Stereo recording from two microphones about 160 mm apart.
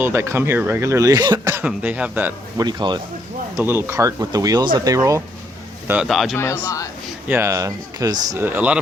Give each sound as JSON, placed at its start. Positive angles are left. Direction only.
{"t": 0.0, "sound": "speech", "side_deg": -15}
{"t": 1.6, "sound": "speech", "side_deg": -10}
{"t": 2.6, "sound": "speech", "side_deg": -25}
{"t": 3.6, "sound": "speech", "side_deg": -15}
{"t": 5.9, "sound": "speech", "side_deg": -5}
{"t": 6.3, "sound": "speech", "side_deg": 15}
{"t": 7.3, "sound": "speech", "side_deg": -15}